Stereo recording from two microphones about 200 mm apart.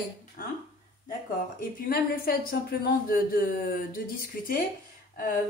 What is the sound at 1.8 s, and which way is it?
Speech, 50° left (ahead or behind).